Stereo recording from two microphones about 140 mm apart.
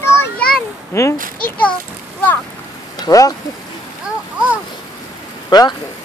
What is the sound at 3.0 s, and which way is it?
Speech, 25° left (ahead or behind).